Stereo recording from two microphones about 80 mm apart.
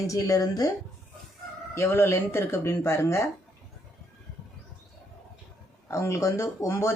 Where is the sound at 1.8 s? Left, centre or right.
Left.